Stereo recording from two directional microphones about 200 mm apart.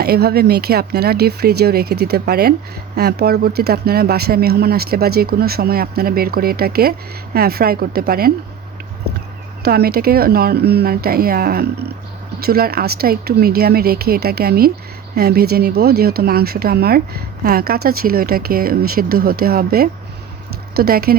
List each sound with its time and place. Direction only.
0.0 s speech: 50° right (ahead or behind)
9.6 s speech: 50° right (ahead or behind)